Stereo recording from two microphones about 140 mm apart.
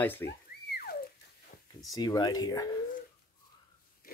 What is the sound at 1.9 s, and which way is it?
Speech, 30° left (ahead or behind).